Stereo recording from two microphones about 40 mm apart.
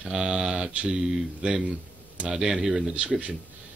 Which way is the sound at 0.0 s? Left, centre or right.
Centre.